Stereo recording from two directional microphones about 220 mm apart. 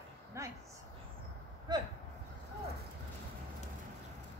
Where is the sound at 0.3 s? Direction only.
15° right (ahead or behind).